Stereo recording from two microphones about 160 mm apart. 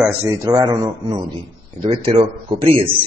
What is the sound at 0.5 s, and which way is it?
A man's voice, 25° right (ahead or behind).